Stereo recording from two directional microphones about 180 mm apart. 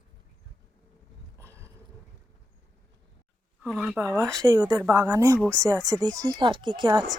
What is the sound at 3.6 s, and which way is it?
Speech, centre (ahead or behind).